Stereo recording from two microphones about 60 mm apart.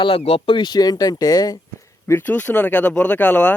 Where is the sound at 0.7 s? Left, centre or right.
Left.